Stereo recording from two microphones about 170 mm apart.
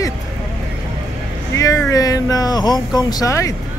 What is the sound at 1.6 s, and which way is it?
Speech, 20° left (ahead or behind).